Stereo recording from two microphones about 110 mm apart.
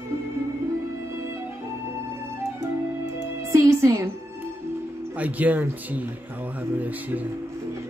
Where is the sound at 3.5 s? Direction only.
25° right (ahead or behind).